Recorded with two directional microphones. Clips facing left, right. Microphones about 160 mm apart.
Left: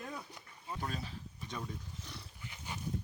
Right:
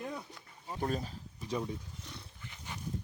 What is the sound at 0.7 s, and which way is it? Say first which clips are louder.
Speech: right 6 dB; 45° right (ahead or behind).